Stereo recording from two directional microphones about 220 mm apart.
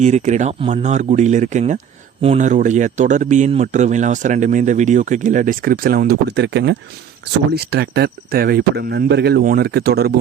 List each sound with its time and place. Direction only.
0.0 s speech: 30° right (ahead or behind)